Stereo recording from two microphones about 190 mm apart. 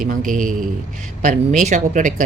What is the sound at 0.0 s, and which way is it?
A man's voice, 45° right (ahead or behind).